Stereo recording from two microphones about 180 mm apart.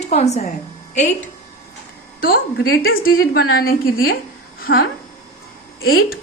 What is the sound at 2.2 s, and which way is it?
A woman's voice, 55° left (ahead or behind).